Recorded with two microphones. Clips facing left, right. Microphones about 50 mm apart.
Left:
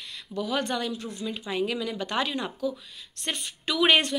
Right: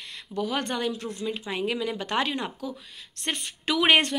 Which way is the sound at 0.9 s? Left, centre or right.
Right.